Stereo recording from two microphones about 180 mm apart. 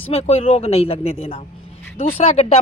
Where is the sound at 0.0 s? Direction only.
35° left (ahead or behind).